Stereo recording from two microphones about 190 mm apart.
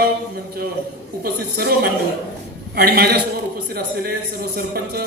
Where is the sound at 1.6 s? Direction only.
55° right (ahead or behind).